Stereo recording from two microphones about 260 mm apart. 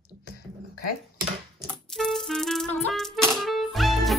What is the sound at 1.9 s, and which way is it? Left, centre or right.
Rattle, centre.